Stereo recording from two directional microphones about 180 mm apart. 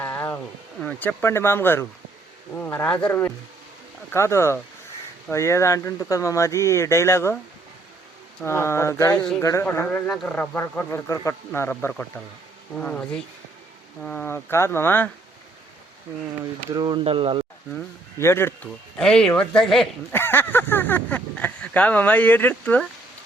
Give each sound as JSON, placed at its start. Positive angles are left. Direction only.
{"t": 0.0, "sound": "a sound", "side_deg": 10}
{"t": 0.8, "sound": "speech", "side_deg": 10}
{"t": 8.4, "sound": "speech", "side_deg": 15}
{"t": 16.4, "sound": "speech", "side_deg": -25}
{"t": 17.7, "sound": "speech", "side_deg": 10}